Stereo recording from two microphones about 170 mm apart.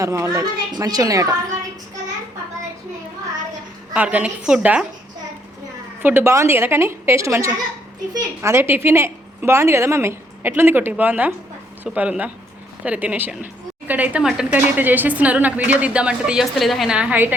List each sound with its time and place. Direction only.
0.0 s a woman's voice: 15° right (ahead or behind)
3.9 s a woman's voice: 10° right (ahead or behind)
6.0 s a woman's voice: 15° right (ahead or behind)